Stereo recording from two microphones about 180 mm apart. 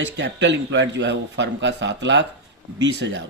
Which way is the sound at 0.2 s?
80° right.